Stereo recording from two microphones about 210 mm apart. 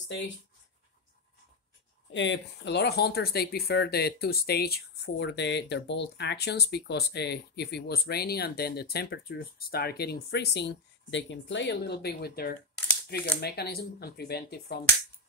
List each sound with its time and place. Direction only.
2.1 s speech: 60° left (ahead or behind)